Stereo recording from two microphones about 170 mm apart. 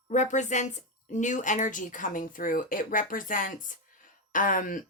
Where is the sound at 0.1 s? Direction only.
45° left (ahead or behind).